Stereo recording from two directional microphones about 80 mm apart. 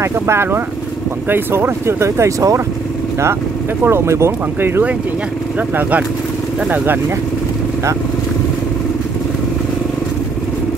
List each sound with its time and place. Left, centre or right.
0.0 s speech: right
3.8 s speech: right
5.8 s speech: centre